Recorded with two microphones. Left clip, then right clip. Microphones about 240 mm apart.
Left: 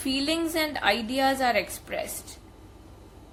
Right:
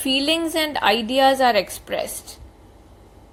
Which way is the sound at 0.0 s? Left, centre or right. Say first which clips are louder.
Right 7 dB; centre.